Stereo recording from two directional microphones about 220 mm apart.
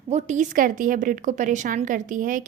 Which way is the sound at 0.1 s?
35° right (ahead or behind).